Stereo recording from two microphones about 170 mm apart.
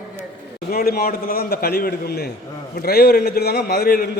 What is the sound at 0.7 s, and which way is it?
A man's voice, 60° left (ahead or behind).